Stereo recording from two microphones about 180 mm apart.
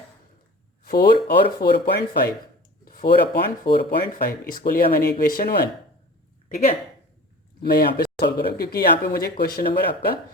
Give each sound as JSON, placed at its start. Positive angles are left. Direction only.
{"t": 0.9, "sound": "speech", "side_deg": 55}
{"t": 7.6, "sound": "speech", "side_deg": 60}